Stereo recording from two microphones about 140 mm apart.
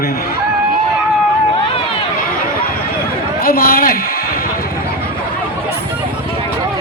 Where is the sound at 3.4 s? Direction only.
90° left.